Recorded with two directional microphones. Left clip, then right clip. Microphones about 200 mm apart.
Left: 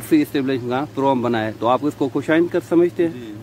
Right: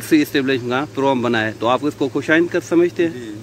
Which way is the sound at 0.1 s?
5° left (ahead or behind).